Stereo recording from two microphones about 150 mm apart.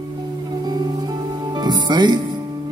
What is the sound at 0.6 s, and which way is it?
Music, 30° right (ahead or behind).